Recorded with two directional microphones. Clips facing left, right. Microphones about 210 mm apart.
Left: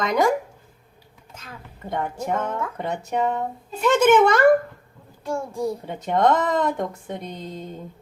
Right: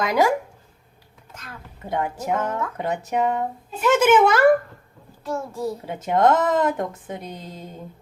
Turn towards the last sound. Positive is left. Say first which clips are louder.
# left 2 dB
turn(degrees=-5)  # may be behind; listen again after turning